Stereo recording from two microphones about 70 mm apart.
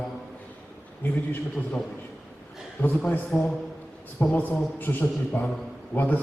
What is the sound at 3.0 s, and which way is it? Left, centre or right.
A man's voice, centre.